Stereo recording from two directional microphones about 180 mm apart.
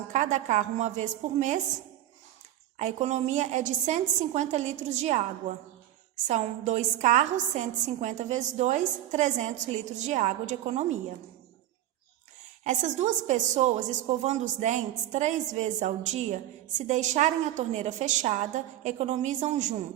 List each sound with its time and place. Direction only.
0.1 s a woman's voice: 40° right (ahead or behind)
2.7 s a woman's voice: 40° right (ahead or behind)
12.6 s a woman's voice: 40° right (ahead or behind)